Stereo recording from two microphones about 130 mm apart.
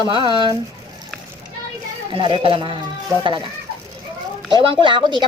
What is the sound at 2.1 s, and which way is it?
Speech, 40° right (ahead or behind).